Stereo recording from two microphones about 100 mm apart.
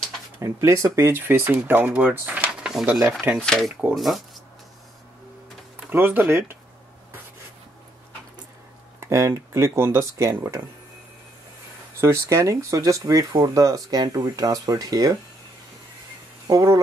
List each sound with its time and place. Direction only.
0.4 s speech: 30° right (ahead or behind)
2.6 s speech: 5° right (ahead or behind)
3.1 s speech: 15° right (ahead or behind)
3.3 s speech: 5° left (ahead or behind)
5.9 s speech: 20° right (ahead or behind)
9.0 s speech: 25° right (ahead or behind)
12.0 s speech: 25° right (ahead or behind)
16.4 s speech: 35° right (ahead or behind)